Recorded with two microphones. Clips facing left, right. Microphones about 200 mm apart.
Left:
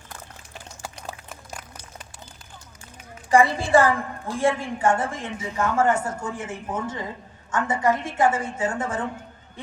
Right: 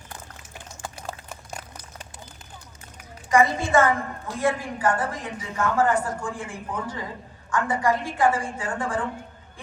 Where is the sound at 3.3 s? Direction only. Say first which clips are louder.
Left 2 dB; 30° left (ahead or behind).